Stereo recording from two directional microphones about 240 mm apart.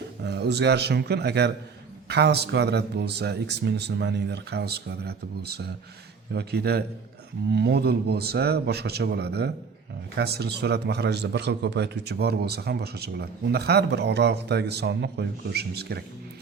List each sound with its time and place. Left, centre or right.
0.2 s a man's voice: right